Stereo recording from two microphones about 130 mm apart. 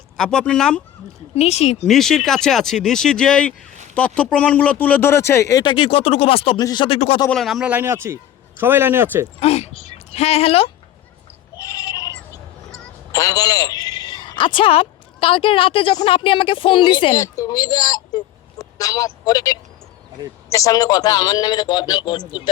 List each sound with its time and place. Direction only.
0.2 s speech: 5° left (ahead or behind)
1.4 s speech: 55° left (ahead or behind)
1.8 s speech: 5° left (ahead or behind); by 5.6 s 25° left (ahead or behind)
5.6 s speech: 45° left (ahead or behind)
6.6 s speech: 30° left (ahead or behind)
6.8 s speech: 45° left (ahead or behind)
7.3 s speech: centre (ahead or behind)
7.7 s speech: 20° right (ahead or behind)
9.4 s speech: 55° left (ahead or behind)
11.5 s sheep: 30° left (ahead or behind)
13.1 s a woman's voice: 25° left (ahead or behind)
17.2 s a man's voice: 25° left (ahead or behind)